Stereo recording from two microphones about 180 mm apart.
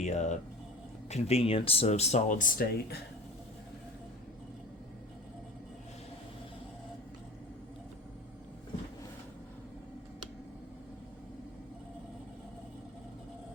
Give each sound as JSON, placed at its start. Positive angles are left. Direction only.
{"t": 0.0, "sound": "speech", "side_deg": 40}